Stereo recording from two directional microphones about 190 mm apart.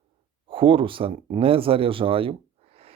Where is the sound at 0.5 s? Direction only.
25° right (ahead or behind).